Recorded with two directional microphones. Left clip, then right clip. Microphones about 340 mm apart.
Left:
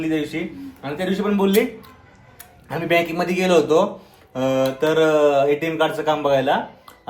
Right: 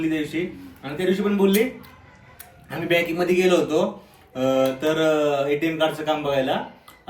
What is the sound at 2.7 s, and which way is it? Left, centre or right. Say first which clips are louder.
Speech: left 2 dB; centre.